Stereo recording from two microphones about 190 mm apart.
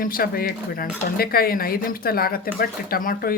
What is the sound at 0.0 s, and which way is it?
Speech, 50° left (ahead or behind).